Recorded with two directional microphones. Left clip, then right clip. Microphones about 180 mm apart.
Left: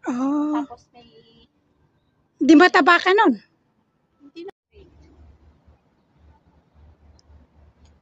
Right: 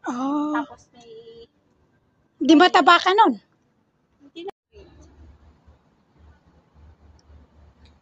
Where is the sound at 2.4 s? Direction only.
25° left (ahead or behind).